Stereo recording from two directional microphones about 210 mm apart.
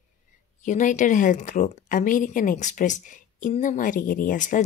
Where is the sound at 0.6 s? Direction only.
35° left (ahead or behind).